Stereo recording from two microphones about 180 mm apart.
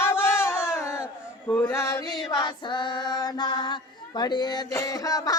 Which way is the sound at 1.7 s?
15° left (ahead or behind).